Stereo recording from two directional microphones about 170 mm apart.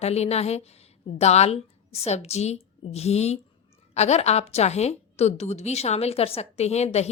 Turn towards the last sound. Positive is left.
turn(degrees=40)  # may be behind; listen again after turning